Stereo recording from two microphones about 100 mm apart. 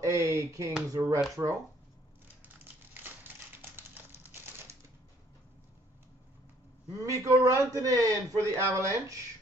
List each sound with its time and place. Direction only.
0.0 s a man's voice: 30° right (ahead or behind)
2.4 s crumpling: 20° right (ahead or behind)
7.0 s a man's voice: 35° right (ahead or behind)